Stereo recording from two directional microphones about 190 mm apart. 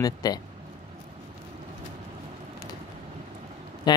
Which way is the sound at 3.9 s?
20° left (ahead or behind).